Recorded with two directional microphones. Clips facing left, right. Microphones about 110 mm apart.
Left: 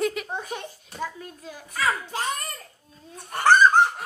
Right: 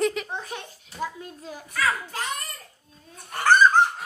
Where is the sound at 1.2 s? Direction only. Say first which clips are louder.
Right 1 dB; 30° right (ahead or behind).